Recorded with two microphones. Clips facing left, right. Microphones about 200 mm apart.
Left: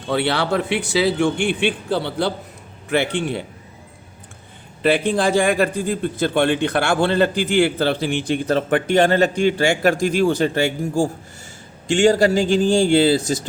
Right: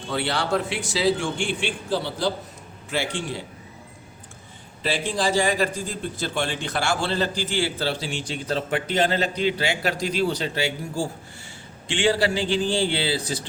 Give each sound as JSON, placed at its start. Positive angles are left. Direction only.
{"t": 0.1, "sound": "a man's voice", "side_deg": 60}
{"t": 4.8, "sound": "a man's voice", "side_deg": 60}